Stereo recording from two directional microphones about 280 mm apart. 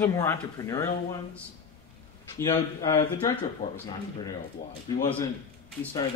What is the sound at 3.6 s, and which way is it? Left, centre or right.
Speech, left.